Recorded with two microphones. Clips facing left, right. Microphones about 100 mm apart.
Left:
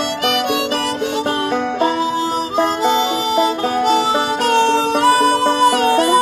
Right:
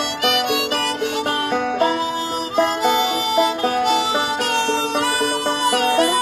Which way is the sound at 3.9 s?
40° left (ahead or behind).